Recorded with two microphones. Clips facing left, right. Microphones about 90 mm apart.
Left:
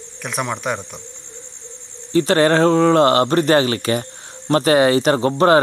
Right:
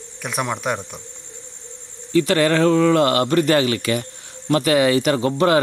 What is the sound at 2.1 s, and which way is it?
Speech, 35° left (ahead or behind).